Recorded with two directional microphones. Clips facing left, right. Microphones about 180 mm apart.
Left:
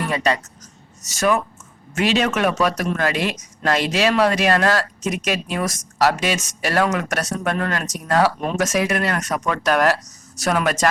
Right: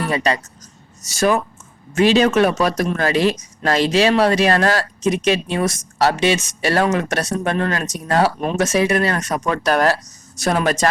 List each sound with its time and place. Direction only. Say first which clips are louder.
0.0 s speech: right 1 dB; 35° right (ahead or behind)